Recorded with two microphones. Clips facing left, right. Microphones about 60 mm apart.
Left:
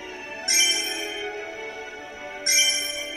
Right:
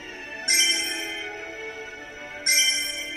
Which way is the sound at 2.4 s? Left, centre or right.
Right.